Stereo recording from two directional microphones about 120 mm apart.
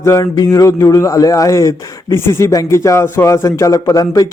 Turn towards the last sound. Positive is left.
turn(degrees=30)  # may be behind; listen again after turning